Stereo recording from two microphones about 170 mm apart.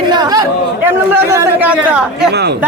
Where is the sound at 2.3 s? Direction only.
75° right (ahead or behind).